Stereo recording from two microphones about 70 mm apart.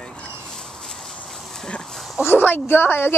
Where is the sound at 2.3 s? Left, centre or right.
Left.